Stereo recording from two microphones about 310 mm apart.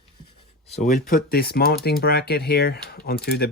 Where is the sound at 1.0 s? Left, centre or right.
Left.